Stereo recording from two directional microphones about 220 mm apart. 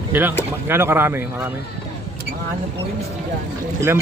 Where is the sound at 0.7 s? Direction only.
10° right (ahead or behind).